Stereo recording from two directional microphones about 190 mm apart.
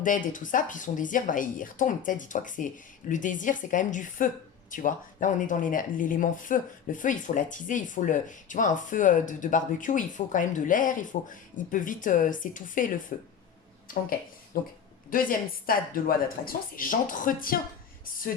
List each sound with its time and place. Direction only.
0.0 s speech: 45° left (ahead or behind)